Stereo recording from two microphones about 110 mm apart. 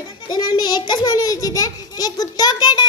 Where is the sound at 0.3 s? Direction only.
40° left (ahead or behind).